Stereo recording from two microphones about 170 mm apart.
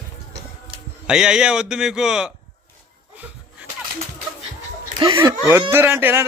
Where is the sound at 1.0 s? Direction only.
5° right (ahead or behind).